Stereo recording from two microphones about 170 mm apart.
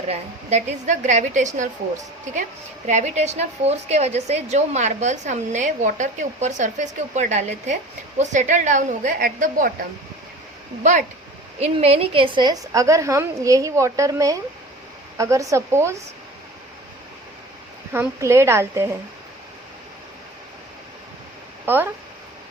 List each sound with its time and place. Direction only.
0.1 s a woman's voice: 40° right (ahead or behind)
2.8 s a woman's voice: 45° right (ahead or behind)
11.6 s a woman's voice: 35° right (ahead or behind); by 16.0 s 15° right (ahead or behind)
17.9 s a woman's voice: 15° right (ahead or behind)
21.7 s a woman's voice: 15° right (ahead or behind)